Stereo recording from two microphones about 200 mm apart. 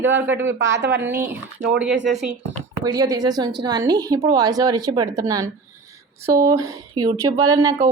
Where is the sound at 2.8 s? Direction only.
20° right (ahead or behind).